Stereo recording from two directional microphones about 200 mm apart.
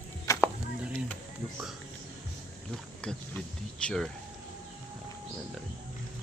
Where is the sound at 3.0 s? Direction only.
5° left (ahead or behind).